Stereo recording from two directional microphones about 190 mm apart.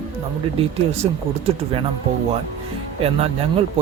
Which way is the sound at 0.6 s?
30° right (ahead or behind).